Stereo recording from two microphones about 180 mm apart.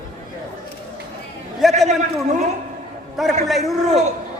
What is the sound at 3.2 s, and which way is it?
Speech, centre (ahead or behind).